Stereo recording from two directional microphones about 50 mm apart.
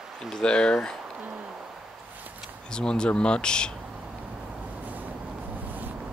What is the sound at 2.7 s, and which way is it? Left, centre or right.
Speech, centre.